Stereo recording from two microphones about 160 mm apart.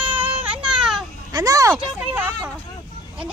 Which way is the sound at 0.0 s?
10° right (ahead or behind).